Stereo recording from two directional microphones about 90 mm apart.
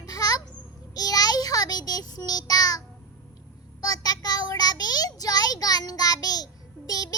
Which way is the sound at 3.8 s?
45° left (ahead or behind).